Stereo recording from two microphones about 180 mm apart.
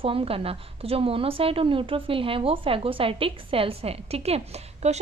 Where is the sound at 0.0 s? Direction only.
30° right (ahead or behind).